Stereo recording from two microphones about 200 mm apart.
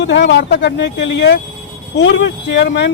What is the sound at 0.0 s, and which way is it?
Speech, 60° left (ahead or behind).